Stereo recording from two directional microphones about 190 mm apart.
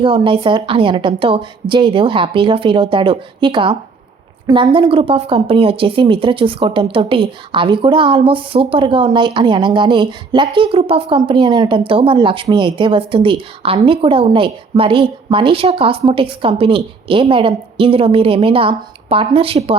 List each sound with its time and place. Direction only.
0.0 s a woman's voice: 25° right (ahead or behind)